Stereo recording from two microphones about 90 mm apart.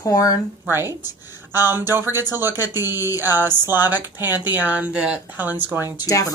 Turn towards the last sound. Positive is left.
turn(degrees=40)  # may be behind; listen again after turning